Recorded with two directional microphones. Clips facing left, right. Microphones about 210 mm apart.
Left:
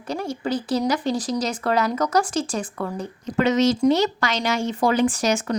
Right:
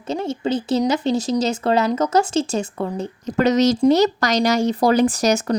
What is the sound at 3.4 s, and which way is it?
Speech, 40° right (ahead or behind).